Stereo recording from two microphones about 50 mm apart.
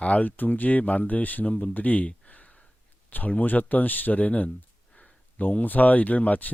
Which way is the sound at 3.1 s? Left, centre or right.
Left.